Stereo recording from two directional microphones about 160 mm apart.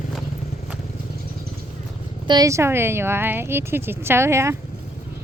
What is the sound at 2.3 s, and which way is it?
Speech, 20° right (ahead or behind).